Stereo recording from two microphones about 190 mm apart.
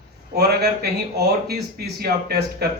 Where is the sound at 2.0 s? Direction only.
55° right (ahead or behind).